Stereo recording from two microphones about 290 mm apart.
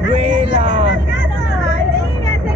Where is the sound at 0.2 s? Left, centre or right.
Centre.